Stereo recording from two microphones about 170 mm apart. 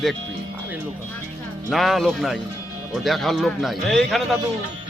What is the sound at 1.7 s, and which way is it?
A man's voice, centre (ahead or behind).